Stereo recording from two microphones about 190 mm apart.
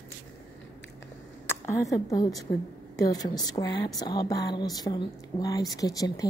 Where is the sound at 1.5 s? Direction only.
15° left (ahead or behind).